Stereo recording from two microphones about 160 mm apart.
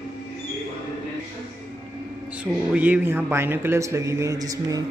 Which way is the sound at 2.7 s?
10° right (ahead or behind).